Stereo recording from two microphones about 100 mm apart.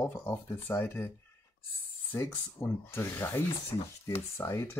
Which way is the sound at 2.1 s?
20° left (ahead or behind).